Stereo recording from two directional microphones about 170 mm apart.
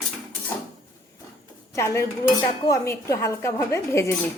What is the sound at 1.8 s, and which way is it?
Dishes, 15° left (ahead or behind).